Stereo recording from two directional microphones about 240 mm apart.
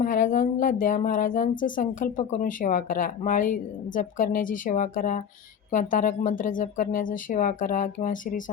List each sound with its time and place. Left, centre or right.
0.0 s speech: left